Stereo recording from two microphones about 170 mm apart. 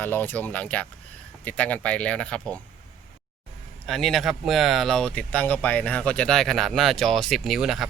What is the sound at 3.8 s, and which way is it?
Speech, centre (ahead or behind).